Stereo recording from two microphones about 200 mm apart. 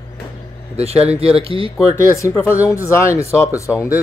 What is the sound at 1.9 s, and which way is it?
Speech, 15° left (ahead or behind).